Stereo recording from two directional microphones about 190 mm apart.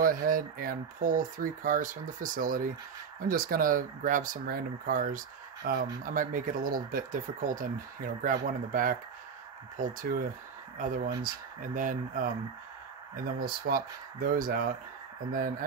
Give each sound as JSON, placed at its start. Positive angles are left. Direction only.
{"t": 0.0, "sound": "speech", "side_deg": -45}